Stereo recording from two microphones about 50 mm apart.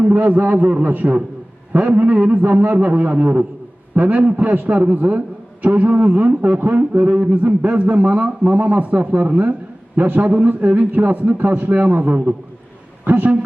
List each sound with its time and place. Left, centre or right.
0.0 s a man's voice: right